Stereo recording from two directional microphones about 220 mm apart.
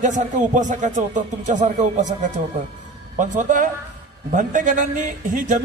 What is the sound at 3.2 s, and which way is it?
A man's voice, 35° right (ahead or behind).